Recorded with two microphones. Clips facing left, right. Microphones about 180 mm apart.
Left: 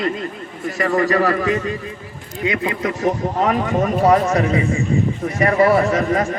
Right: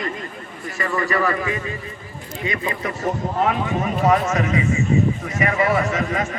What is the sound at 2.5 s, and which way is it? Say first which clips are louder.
Speech: left 5 dB; 65° left (ahead or behind).